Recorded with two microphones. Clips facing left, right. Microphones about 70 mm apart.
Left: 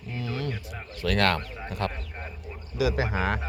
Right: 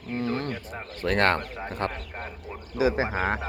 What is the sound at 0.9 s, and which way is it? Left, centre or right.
Speech, right.